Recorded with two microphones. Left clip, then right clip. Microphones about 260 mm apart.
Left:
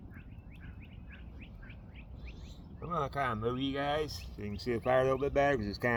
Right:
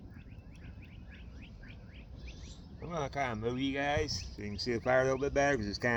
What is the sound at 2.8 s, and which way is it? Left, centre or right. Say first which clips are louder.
Speech: left 2 dB; left.